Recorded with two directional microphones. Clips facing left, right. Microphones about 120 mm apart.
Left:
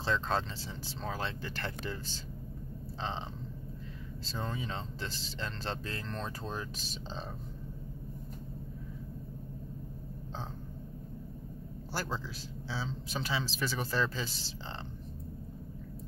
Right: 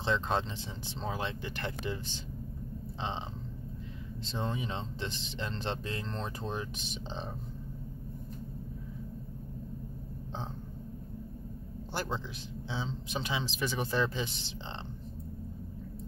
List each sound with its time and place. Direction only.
0.0 s speech: 20° right (ahead or behind)
11.9 s speech: 20° right (ahead or behind)